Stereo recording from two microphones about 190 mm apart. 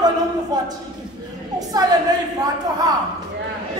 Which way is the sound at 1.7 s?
20° right (ahead or behind).